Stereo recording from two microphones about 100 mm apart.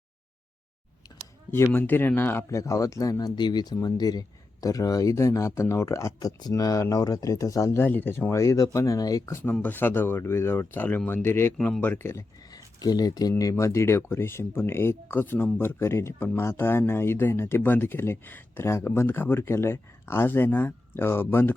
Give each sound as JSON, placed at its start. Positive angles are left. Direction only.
{"t": 1.5, "sound": "speech", "side_deg": 25}
{"t": 2.5, "sound": "speech", "side_deg": 30}
{"t": 9.4, "sound": "speech", "side_deg": 15}
{"t": 11.5, "sound": "speech", "side_deg": 5}
{"t": 11.8, "sound": "speech", "side_deg": 20}
{"t": 12.5, "sound": "a sound", "side_deg": 40}
{"t": 13.4, "sound": "speech", "side_deg": 35}